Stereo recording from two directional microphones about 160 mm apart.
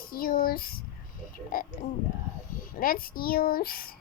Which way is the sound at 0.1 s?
65° left (ahead or behind).